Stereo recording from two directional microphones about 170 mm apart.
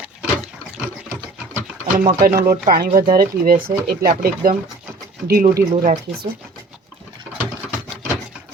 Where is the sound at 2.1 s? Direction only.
55° right (ahead or behind).